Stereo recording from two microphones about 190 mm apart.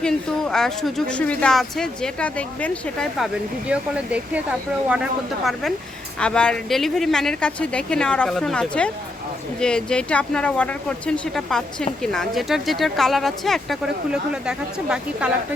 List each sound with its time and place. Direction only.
0.0 s a woman's voice: 5° left (ahead or behind)
3.7 s speech: 5° right (ahead or behind)
6.1 s a woman's voice: 5° left (ahead or behind)